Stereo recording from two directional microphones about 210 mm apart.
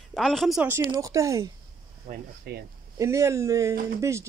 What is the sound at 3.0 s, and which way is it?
A man's voice, 15° right (ahead or behind).